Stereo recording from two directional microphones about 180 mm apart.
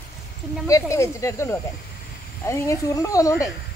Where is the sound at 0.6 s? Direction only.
15° left (ahead or behind).